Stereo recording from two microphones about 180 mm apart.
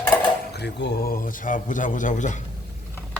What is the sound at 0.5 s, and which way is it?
A man's voice, 70° left (ahead or behind).